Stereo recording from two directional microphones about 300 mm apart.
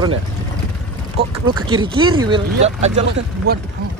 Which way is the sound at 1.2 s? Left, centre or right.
Centre.